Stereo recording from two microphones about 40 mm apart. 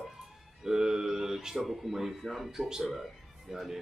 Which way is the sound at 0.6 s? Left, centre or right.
Centre.